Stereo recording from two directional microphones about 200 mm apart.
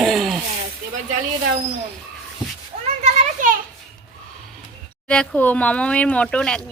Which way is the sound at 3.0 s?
35° right (ahead or behind).